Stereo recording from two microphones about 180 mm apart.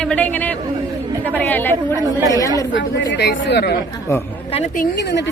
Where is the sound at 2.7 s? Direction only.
80° left.